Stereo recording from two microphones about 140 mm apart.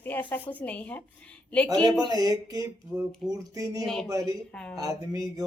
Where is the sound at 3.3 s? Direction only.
25° right (ahead or behind).